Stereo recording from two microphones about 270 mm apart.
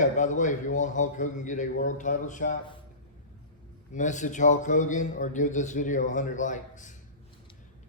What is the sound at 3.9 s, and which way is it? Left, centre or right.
A man's voice, left.